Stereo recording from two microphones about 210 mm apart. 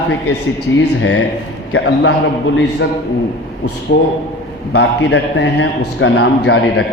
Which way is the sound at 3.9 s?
55° left (ahead or behind).